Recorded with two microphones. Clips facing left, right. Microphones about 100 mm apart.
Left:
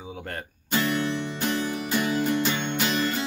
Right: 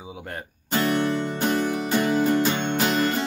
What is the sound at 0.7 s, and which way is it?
Music, 55° right (ahead or behind).